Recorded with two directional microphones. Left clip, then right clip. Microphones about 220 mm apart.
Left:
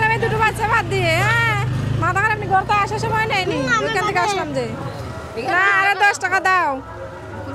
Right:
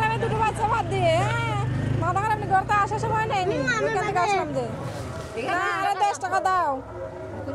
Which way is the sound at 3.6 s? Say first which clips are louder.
Left 5 dB; 5° left (ahead or behind).